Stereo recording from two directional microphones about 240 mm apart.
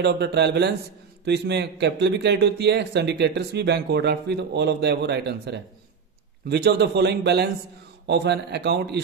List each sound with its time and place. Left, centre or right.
0.0 s a man's voice: right